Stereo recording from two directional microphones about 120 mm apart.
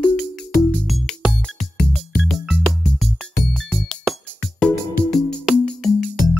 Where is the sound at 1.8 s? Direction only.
10° left (ahead or behind).